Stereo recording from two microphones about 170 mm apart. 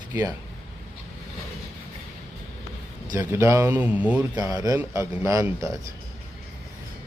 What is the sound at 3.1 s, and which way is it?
A man's voice, 15° right (ahead or behind).